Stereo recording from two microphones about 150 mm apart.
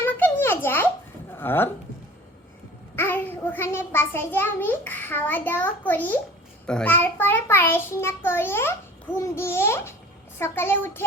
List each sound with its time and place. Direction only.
0.0 s a sound: 15° left (ahead or behind)
1.4 s speech: 15° left (ahead or behind)
2.9 s a child's voice: 15° left (ahead or behind)